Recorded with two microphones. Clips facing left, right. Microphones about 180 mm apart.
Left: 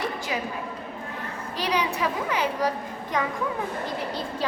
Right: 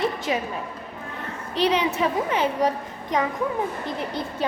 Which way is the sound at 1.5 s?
25° right (ahead or behind).